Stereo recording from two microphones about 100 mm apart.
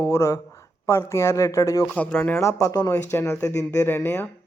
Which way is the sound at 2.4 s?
30° left (ahead or behind).